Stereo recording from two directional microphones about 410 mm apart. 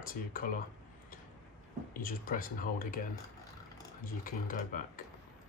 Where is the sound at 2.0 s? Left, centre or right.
Left.